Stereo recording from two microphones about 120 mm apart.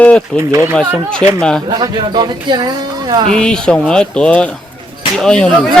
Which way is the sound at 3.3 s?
5° left (ahead or behind).